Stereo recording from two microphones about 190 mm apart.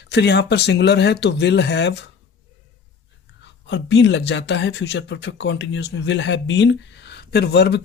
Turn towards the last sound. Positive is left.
turn(degrees=60)  # may be behind; listen again after turning